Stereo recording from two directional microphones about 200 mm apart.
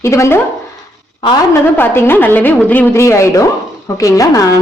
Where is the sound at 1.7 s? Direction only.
10° left (ahead or behind).